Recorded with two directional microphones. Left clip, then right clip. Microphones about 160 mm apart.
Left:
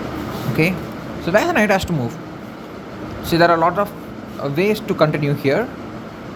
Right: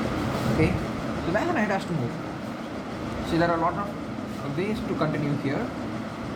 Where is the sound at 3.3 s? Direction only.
65° left (ahead or behind).